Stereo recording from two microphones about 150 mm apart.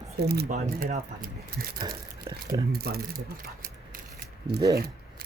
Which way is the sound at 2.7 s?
90° right.